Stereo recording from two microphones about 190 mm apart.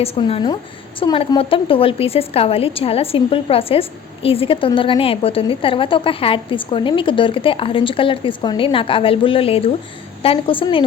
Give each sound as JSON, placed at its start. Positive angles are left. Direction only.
{"t": 0.0, "sound": "a woman's voice", "side_deg": 30}